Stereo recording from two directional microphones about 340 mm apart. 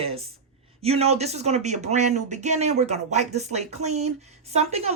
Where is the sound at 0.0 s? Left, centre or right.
Centre.